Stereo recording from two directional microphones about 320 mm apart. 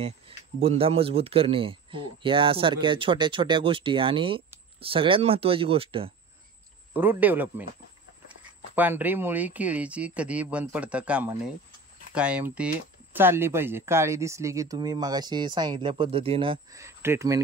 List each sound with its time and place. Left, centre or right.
0.6 s speech: centre
6.9 s speech: centre
8.7 s speech: centre